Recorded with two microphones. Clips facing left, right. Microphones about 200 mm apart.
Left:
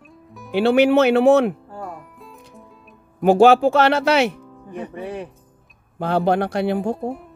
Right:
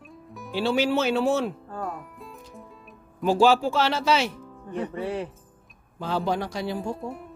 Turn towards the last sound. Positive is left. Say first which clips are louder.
# left 8 dB
turn(degrees=65)  # may be behind; listen again after turning